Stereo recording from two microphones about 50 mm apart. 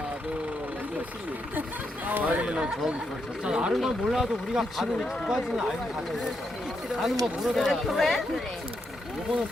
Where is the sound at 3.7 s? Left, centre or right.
Centre.